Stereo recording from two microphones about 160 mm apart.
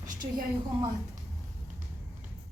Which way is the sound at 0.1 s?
60° right (ahead or behind).